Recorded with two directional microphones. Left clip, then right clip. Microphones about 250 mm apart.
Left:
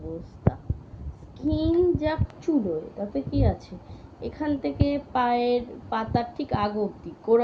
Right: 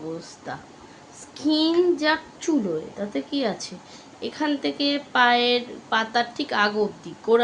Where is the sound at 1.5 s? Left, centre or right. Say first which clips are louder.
Right 5 dB; right.